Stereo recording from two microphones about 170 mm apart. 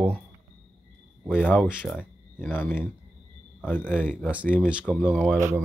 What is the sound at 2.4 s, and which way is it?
Speech, 10° left (ahead or behind).